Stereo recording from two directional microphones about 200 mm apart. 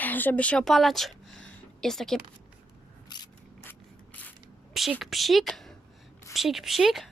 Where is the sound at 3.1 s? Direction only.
20° left (ahead or behind).